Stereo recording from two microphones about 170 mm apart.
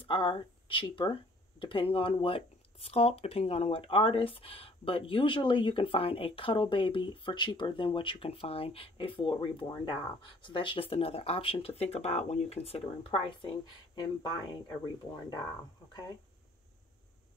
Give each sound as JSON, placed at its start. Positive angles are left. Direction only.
{"t": 0.0, "sound": "speech", "side_deg": 30}
{"t": 15.9, "sound": "speech", "side_deg": 25}